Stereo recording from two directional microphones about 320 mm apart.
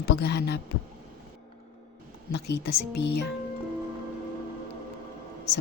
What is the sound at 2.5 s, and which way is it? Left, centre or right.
Speech, left.